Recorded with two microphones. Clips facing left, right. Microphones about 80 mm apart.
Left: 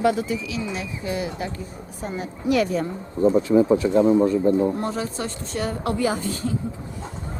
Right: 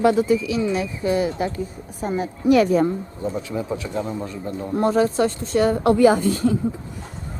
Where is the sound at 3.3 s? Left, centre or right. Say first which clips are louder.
Left 11 dB; left.